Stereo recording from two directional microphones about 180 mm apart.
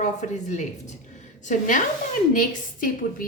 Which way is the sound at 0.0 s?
40° left (ahead or behind).